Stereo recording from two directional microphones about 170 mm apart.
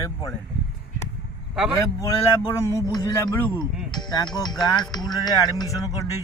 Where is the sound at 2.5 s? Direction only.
15° left (ahead or behind).